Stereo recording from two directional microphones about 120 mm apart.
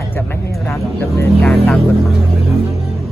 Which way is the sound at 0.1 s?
20° left (ahead or behind).